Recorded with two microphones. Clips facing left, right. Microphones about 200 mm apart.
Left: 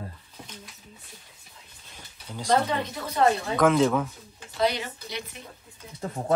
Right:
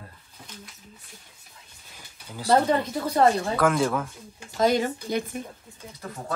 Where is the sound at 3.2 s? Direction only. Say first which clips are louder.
Right 2 dB; 40° right (ahead or behind).